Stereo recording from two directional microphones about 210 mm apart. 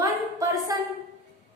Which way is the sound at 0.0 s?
15° right (ahead or behind).